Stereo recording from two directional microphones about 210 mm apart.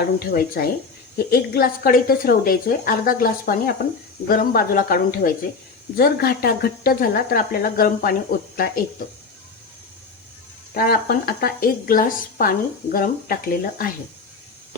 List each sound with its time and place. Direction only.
0.0 s a woman's voice: 45° left (ahead or behind)
10.8 s a woman's voice: 45° left (ahead or behind)